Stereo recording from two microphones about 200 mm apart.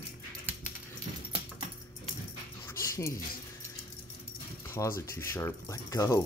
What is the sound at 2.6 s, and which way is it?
Dog, 15° left (ahead or behind).